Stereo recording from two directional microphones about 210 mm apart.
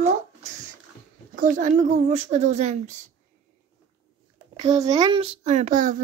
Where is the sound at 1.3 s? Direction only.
40° right (ahead or behind).